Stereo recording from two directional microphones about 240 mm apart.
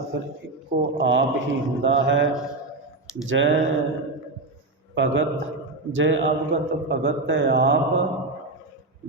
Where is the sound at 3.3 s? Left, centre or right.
Right.